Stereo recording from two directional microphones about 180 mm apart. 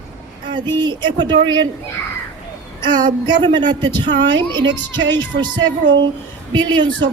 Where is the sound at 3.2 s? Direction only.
25° right (ahead or behind).